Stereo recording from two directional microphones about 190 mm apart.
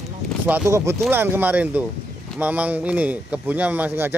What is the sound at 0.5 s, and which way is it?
Speech, 10° right (ahead or behind).